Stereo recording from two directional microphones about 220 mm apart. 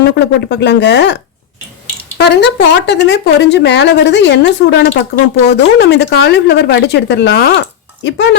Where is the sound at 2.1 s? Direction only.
50° left (ahead or behind).